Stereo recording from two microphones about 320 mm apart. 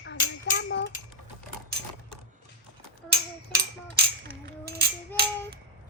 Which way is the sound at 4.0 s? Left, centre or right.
Right.